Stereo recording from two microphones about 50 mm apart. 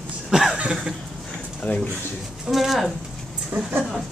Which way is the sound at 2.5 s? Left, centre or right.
Centre.